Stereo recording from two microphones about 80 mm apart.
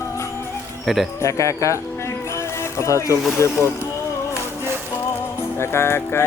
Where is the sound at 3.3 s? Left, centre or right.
Left.